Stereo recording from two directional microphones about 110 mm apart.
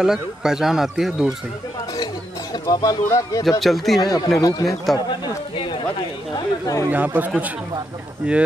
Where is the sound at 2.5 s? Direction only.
35° left (ahead or behind).